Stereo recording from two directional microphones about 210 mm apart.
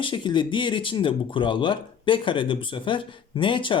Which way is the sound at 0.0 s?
25° left (ahead or behind).